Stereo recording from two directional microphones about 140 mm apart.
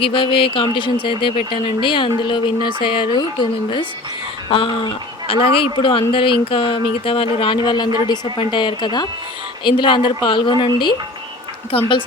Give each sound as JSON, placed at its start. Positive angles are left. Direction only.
{"t": 0.0, "sound": "speech", "side_deg": 40}
{"t": 4.4, "sound": "speech", "side_deg": 35}